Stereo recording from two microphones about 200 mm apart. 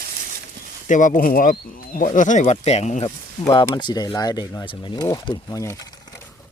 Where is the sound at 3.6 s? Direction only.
20° left (ahead or behind).